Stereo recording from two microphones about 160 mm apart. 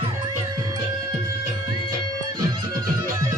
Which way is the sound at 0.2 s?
25° right (ahead or behind).